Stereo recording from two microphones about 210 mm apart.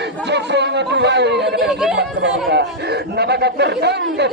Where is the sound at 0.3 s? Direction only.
55° right (ahead or behind).